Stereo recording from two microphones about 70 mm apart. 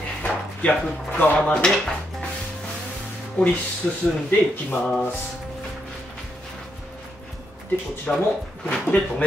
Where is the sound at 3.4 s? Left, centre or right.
Centre.